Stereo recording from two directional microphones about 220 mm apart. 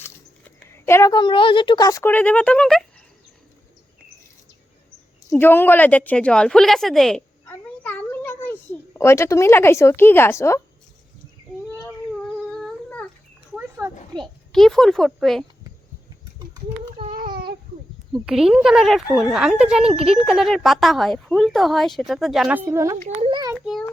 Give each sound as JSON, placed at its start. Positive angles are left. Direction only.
{"t": 0.7, "sound": "a woman's voice", "side_deg": 10}
{"t": 5.3, "sound": "a woman's voice", "side_deg": 10}
{"t": 12.5, "sound": "humming", "side_deg": 0}
{"t": 13.6, "sound": "a sound", "side_deg": -10}
{"t": 14.2, "sound": "speech", "side_deg": 0}
{"t": 17.1, "sound": "baby cry", "side_deg": -40}
{"t": 18.1, "sound": "speech", "side_deg": 0}
{"t": 23.0, "sound": "a sound", "side_deg": -25}
{"t": 23.6, "sound": "a sound", "side_deg": 0}